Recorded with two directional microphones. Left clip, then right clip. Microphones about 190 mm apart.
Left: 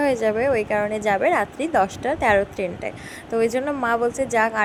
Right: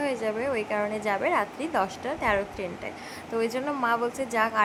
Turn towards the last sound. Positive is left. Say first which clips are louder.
# left 6 dB
turn(degrees=25)  # may be behind; listen again after turning